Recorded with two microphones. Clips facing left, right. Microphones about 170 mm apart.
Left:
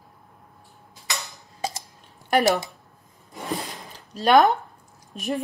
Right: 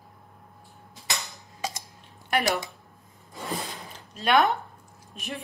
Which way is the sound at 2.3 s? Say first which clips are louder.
Left 6 dB; 40° left (ahead or behind).